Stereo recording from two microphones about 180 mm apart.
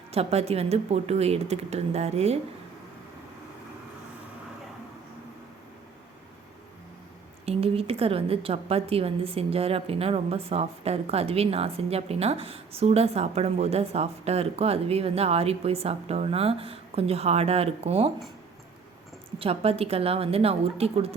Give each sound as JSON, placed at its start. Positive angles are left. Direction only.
{"t": 0.1, "sound": "a woman's voice", "side_deg": -35}
{"t": 7.4, "sound": "a woman's voice", "side_deg": -35}
{"t": 19.4, "sound": "a woman's voice", "side_deg": -35}